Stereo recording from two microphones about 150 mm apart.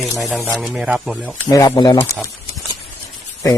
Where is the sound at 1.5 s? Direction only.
25° left (ahead or behind).